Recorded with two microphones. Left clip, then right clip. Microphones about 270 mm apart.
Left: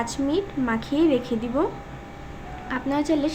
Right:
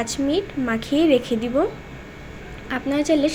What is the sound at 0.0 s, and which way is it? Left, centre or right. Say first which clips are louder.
A woman's voice: right 2 dB; centre.